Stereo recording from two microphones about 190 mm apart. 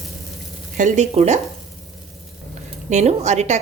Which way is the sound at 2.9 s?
35° right (ahead or behind).